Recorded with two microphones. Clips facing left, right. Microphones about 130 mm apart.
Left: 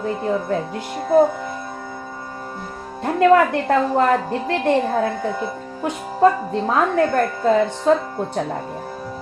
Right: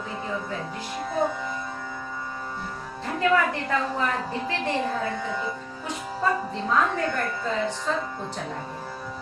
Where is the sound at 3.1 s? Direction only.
60° left (ahead or behind).